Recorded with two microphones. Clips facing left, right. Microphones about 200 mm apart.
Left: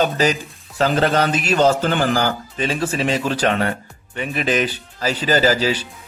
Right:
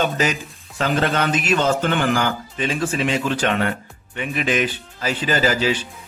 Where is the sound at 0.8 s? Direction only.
35° left (ahead or behind).